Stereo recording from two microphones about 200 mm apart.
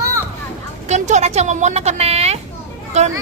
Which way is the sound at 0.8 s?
35° right (ahead or behind).